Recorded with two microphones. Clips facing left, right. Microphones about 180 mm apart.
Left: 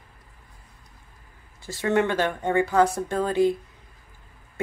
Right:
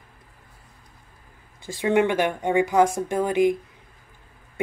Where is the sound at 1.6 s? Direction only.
15° right (ahead or behind).